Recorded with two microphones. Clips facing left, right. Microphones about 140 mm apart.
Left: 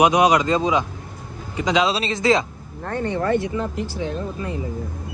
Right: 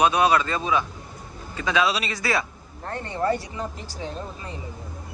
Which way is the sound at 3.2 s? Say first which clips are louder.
Left 2 dB; 35° right (ahead or behind).